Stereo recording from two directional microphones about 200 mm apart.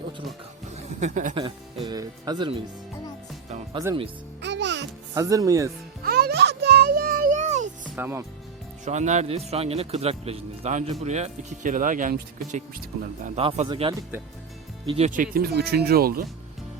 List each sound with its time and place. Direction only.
0.8 s a sound: 35° right (ahead or behind)
1.4 s speech: 25° right (ahead or behind)
3.8 s speech: 20° right (ahead or behind)
4.4 s music: 60° right (ahead or behind)
5.1 s speech: 15° right (ahead or behind)
6.1 s music: 50° right (ahead or behind)
7.9 s speech: 10° right (ahead or behind)
8.8 s speech: 35° right (ahead or behind)